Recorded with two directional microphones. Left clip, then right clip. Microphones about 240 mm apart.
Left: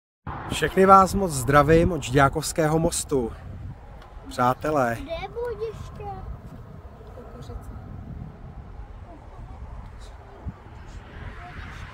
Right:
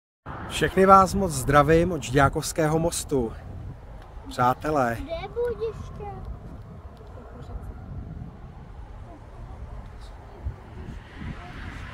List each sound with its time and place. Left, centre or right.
0.2 s a sound: left
0.5 s speech: centre
5.0 s speech: left
11.1 s vehicle: right